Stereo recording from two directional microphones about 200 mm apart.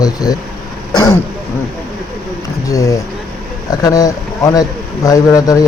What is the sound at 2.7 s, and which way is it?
Speech, 15° left (ahead or behind).